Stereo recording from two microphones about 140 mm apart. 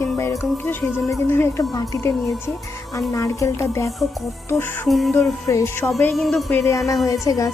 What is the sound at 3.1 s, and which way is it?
Speech, 20° left (ahead or behind).